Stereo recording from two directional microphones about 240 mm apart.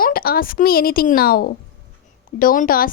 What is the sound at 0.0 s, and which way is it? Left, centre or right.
A woman's voice, left.